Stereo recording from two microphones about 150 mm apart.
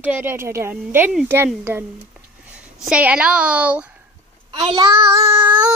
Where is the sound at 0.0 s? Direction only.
15° right (ahead or behind).